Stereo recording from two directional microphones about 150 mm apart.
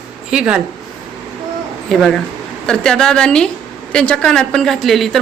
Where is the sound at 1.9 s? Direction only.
5° left (ahead or behind).